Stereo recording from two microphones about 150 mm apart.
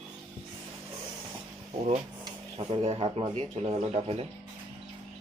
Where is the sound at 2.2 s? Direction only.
35° right (ahead or behind).